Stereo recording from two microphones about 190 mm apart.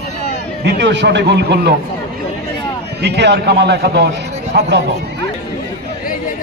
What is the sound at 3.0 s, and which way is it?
A man's voice, 60° right (ahead or behind).